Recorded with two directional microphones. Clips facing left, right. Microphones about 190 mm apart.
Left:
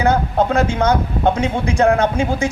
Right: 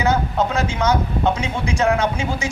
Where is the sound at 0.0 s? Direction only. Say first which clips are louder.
Left 3 dB; 55° left (ahead or behind).